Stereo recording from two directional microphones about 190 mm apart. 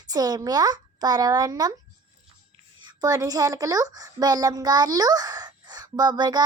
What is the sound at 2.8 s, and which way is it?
A woman's voice, 20° right (ahead or behind).